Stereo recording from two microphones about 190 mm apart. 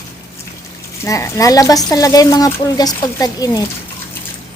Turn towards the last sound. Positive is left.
turn(degrees=20)  # may be behind; listen again after turning